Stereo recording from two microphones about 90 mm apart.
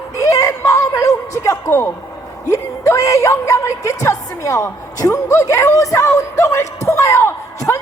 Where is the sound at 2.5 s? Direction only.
35° left (ahead or behind).